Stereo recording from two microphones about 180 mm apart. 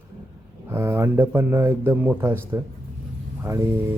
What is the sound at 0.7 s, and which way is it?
Speech, 15° right (ahead or behind).